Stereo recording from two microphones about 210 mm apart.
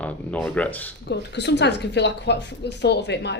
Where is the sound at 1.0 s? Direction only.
55° left (ahead or behind).